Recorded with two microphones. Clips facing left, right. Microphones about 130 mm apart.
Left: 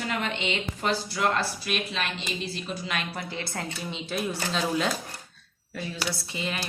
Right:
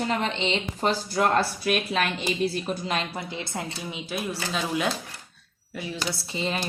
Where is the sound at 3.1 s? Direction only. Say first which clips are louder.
Right 1 dB; 20° right (ahead or behind).